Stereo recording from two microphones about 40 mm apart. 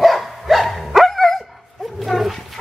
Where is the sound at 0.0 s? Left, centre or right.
Centre.